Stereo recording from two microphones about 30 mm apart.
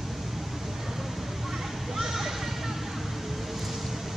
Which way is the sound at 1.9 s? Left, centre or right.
Centre.